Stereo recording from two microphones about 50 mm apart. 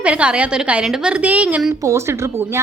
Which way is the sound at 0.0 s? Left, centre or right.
Right.